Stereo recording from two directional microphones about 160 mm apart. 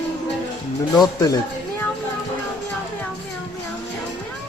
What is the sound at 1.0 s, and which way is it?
Speech, 25° left (ahead or behind).